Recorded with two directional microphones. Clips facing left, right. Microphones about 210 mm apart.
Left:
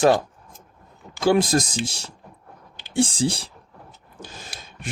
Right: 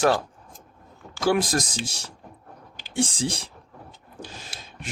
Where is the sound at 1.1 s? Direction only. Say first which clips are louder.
Left 4 dB; 25° left (ahead or behind).